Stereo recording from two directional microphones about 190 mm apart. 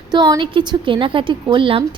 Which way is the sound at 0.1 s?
25° right (ahead or behind).